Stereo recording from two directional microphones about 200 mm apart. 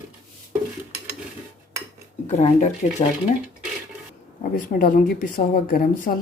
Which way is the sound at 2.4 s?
35° left (ahead or behind).